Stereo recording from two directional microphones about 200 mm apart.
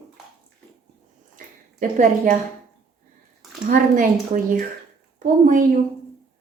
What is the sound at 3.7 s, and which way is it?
A woman's voice, 40° right (ahead or behind).